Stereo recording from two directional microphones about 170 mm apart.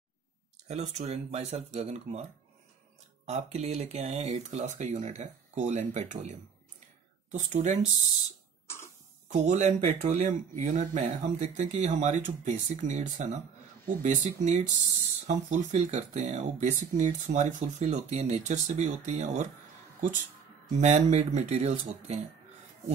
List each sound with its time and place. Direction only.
0.7 s speech: 40° right (ahead or behind)
3.3 s speech: 40° right (ahead or behind)
8.6 s cough: 15° left (ahead or behind)
9.3 s speech: 45° right (ahead or behind)
20.7 s speech: 45° right (ahead or behind)